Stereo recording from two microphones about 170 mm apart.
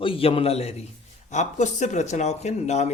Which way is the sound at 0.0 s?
35° left (ahead or behind).